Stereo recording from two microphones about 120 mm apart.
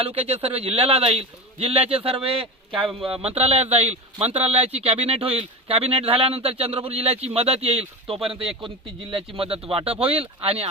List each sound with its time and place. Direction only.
0.0 s speech: 55° right (ahead or behind)